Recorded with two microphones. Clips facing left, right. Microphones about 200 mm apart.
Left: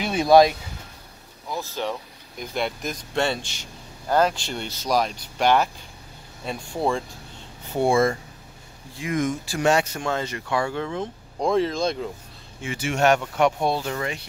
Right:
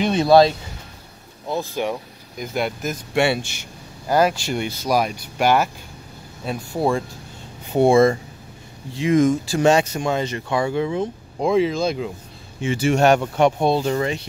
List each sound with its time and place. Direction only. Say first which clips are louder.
0.0 s speech: right 2 dB; 10° left (ahead or behind)
1.5 s speech: right 5 dB; 15° right (ahead or behind)
2.3 s speech: right 3 dB; 5° right (ahead or behind)
7.7 s speech: right 6 dB; 20° right (ahead or behind); by 12.1 s 5° right (ahead or behind)
12.6 s speech: right 5 dB; 30° right (ahead or behind)